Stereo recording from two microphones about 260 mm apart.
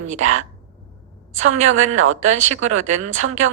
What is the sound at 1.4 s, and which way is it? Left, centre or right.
Speech, right.